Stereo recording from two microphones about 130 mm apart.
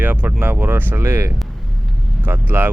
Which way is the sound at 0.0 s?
15° right (ahead or behind).